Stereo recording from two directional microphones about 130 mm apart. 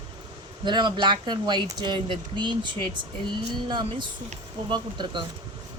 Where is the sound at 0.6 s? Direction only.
35° right (ahead or behind).